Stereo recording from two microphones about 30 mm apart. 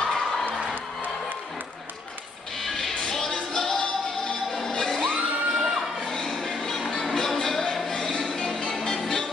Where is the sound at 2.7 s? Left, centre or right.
Centre; by 4.8 s left.